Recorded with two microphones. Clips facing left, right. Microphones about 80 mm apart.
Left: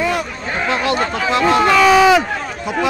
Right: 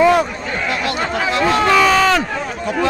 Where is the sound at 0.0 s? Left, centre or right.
Right.